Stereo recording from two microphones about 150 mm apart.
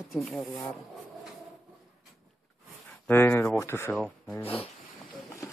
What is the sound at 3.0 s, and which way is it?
Speech, 15° left (ahead or behind).